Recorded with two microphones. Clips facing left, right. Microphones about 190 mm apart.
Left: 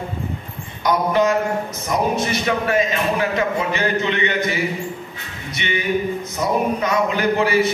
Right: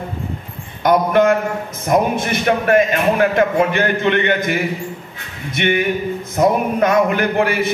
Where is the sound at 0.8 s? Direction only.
55° right (ahead or behind).